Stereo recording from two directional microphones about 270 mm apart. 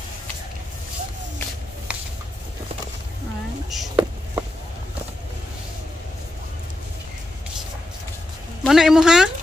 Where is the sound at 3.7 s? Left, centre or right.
Centre.